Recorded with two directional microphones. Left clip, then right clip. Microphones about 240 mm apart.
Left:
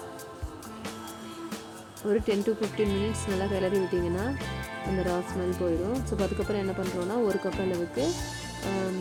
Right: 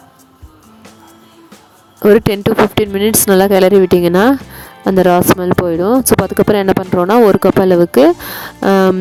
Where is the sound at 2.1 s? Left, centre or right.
Right.